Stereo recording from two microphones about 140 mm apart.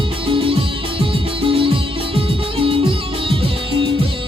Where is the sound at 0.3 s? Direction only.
40° right (ahead or behind).